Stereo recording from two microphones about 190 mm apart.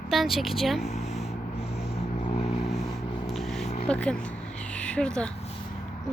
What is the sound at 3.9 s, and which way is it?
Speech, 5° left (ahead or behind).